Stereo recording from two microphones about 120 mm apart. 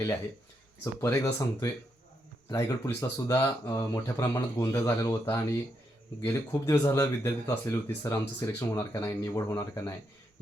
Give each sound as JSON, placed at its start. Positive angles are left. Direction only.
{"t": 1.0, "sound": "a man's voice", "side_deg": 25}